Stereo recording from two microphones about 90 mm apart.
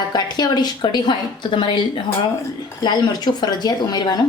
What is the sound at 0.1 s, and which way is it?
A woman's voice, 50° left (ahead or behind).